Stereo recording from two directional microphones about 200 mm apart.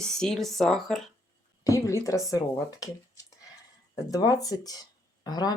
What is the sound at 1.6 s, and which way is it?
Speech, 15° left (ahead or behind).